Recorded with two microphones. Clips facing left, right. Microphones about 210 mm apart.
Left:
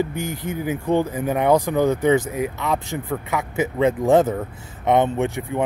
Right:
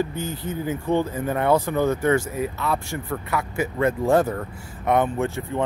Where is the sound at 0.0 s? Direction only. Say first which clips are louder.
Left 2 dB; 15° left (ahead or behind).